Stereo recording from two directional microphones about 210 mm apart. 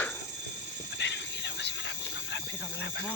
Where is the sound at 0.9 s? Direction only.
55° left (ahead or behind).